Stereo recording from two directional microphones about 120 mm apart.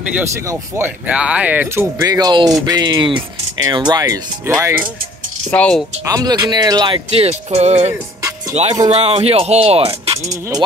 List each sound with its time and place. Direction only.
0.2 s speech: 20° right (ahead or behind)
2.0 s speech: 30° right (ahead or behind)
4.5 s speech: 20° right (ahead or behind)
5.5 s speech: 10° left (ahead or behind)
6.0 s speech: 30° right (ahead or behind)
7.1 s speech: 60° right (ahead or behind)
10.1 s speech: 25° right (ahead or behind)